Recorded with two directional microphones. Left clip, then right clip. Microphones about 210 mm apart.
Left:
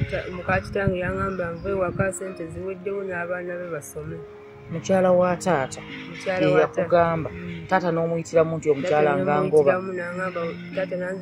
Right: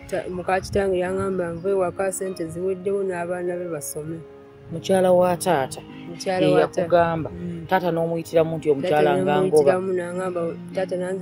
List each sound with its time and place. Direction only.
0.1 s speech: 55° right (ahead or behind)
4.8 s speech: 20° right (ahead or behind)
6.2 s speech: 50° right (ahead or behind)
6.9 s speech: 20° right (ahead or behind)
9.5 s speech: 50° right (ahead or behind)